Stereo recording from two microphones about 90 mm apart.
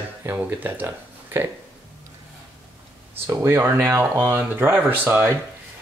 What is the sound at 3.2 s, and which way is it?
Speech, 30° right (ahead or behind).